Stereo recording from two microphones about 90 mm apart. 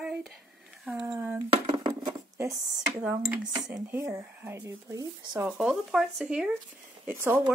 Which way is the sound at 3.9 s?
30° right (ahead or behind).